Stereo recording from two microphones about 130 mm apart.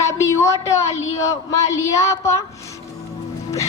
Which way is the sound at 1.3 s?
25° left (ahead or behind).